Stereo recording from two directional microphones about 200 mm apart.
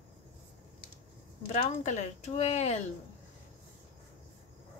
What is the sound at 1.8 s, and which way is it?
Speech, 35° left (ahead or behind).